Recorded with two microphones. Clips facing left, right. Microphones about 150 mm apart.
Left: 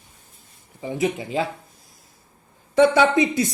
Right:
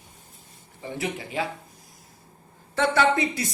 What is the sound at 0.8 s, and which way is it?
Speech, 20° left (ahead or behind).